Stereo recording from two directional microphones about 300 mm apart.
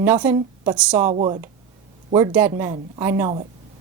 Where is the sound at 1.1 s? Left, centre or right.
Centre.